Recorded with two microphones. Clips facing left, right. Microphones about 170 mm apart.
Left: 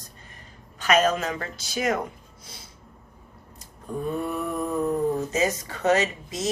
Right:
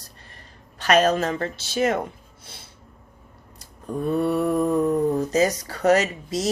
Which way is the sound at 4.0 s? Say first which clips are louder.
Right 7 dB; 35° right (ahead or behind).